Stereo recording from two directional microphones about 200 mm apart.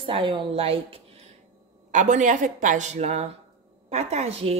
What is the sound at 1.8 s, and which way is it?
A woman's voice, 40° right (ahead or behind).